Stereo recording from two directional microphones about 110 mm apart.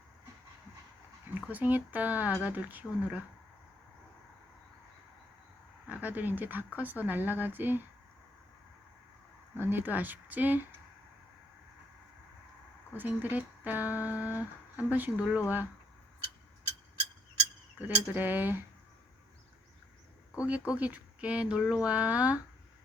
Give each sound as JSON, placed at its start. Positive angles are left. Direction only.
{"t": 1.3, "sound": "speech", "side_deg": -15}
{"t": 5.9, "sound": "speech", "side_deg": -15}
{"t": 9.6, "sound": "speech", "side_deg": -20}
{"t": 12.9, "sound": "speech", "side_deg": -15}
{"t": 17.7, "sound": "speech", "side_deg": -15}
{"t": 20.4, "sound": "speech", "side_deg": -10}